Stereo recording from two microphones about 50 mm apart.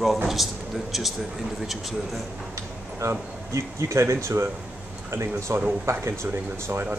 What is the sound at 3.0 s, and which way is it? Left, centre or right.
Speech, right.